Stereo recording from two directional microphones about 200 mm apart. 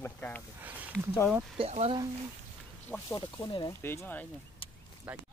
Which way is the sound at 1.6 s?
30° right (ahead or behind).